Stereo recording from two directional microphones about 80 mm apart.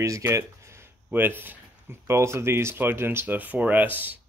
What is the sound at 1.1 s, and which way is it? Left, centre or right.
Speech, right.